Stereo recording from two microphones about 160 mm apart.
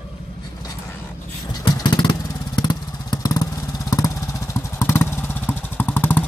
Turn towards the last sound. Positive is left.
turn(degrees=10)  # may be behind; listen again after turning